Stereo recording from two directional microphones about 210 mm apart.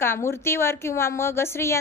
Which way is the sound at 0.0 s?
10° left (ahead or behind).